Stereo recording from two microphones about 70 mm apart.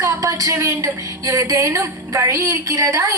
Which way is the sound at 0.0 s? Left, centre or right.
Right.